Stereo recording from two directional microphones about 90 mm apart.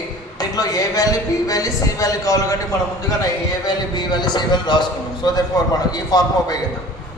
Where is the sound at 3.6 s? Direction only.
50° left (ahead or behind).